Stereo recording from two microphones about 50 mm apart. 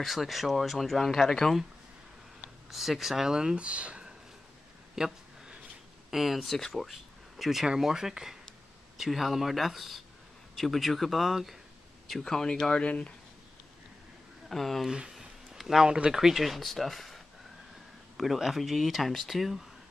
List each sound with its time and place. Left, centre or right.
0.0 s speech: centre
2.4 s speech: centre; by 4.0 s right
4.9 s a sound: centre
6.0 s speech: centre
12.1 s speech: centre
14.5 s speech: centre
14.9 s speech: centre